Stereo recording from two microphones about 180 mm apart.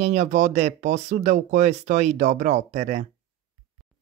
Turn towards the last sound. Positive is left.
turn(degrees=-40)  # may be behind; listen again after turning